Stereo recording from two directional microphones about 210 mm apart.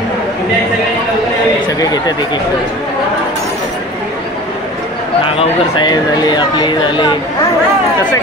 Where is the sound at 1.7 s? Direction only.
20° left (ahead or behind).